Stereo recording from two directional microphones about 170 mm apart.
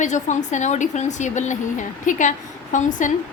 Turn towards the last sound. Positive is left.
turn(degrees=50)  # may be behind; listen again after turning